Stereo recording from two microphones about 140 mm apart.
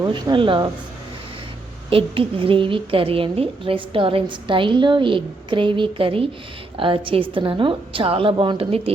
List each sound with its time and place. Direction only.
0.1 s a woman's voice: 35° right (ahead or behind)
1.9 s a woman's voice: 40° right (ahead or behind)